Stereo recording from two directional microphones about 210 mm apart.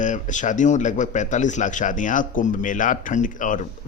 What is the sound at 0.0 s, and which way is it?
A man's voice, 35° left (ahead or behind).